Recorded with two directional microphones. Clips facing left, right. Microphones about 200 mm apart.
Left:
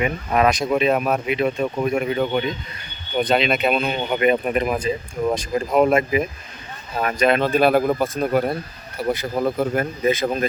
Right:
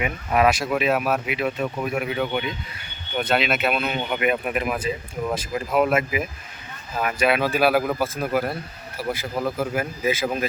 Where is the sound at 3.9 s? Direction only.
30° left (ahead or behind).